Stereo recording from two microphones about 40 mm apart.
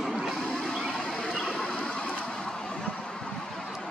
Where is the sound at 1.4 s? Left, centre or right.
Left.